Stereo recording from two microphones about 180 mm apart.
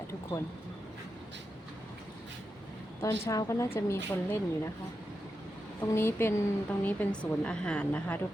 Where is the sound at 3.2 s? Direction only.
15° left (ahead or behind).